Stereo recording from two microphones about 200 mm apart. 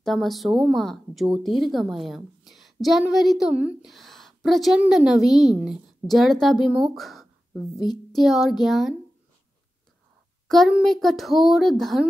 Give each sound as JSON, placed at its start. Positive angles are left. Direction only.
{"t": 0.0, "sound": "a woman's voice", "side_deg": 0}
{"t": 7.7, "sound": "speech", "side_deg": 20}
{"t": 8.1, "sound": "speech", "side_deg": 0}
{"t": 10.5, "sound": "speech", "side_deg": 0}